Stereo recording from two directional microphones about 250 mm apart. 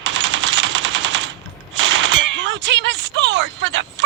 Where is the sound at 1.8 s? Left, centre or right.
Right.